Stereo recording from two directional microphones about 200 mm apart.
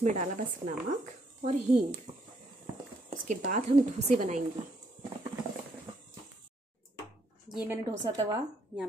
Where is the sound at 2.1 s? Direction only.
25° right (ahead or behind).